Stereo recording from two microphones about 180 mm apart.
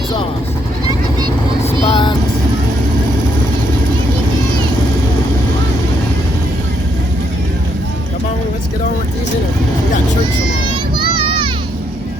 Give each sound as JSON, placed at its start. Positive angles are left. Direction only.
{"t": 1.9, "sound": "vehicle", "side_deg": 25}
{"t": 10.9, "sound": "children playing", "side_deg": -25}